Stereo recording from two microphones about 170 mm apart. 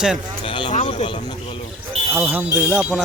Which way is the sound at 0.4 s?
30° left (ahead or behind).